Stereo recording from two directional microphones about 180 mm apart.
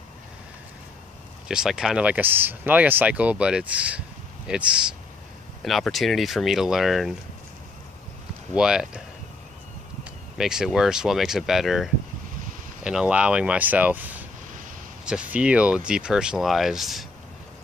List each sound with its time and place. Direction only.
1.5 s speech: 5° right (ahead or behind)
8.5 s speech: 5° right (ahead or behind)
10.3 s speech: 5° right (ahead or behind)